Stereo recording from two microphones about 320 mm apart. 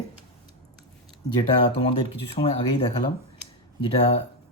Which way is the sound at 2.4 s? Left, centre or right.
Centre.